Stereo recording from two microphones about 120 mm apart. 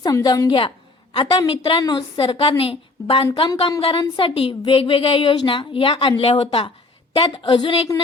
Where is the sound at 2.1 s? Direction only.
50° left (ahead or behind).